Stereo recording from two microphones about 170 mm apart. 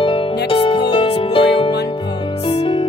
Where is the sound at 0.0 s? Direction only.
30° left (ahead or behind).